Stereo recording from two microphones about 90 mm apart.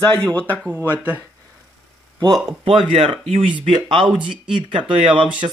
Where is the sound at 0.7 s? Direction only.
20° right (ahead or behind).